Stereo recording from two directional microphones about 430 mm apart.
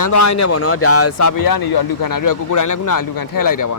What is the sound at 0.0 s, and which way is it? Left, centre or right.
Speech, left.